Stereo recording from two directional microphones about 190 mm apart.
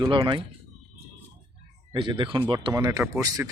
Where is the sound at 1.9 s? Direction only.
25° right (ahead or behind).